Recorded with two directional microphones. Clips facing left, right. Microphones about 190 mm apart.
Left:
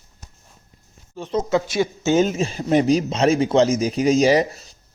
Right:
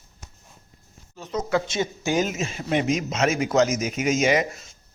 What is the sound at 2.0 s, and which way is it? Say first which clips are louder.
A man's voice: left 7 dB; 30° left (ahead or behind).